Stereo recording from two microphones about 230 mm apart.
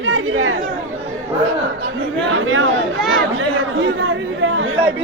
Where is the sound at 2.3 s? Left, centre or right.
Right.